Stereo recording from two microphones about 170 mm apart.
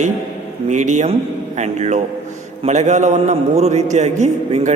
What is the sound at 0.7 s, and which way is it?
A man's voice, 45° right (ahead or behind).